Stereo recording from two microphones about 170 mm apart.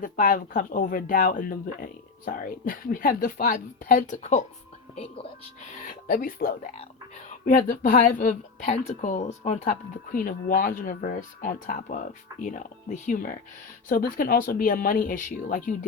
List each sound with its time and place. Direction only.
0.0 s a woman's voice: 55° left (ahead or behind)
4.9 s speech: 35° left (ahead or behind)
5.8 s a woman's voice: 55° left (ahead or behind)